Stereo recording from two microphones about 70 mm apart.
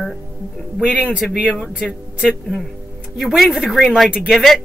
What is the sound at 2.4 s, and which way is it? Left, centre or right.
Speech, centre.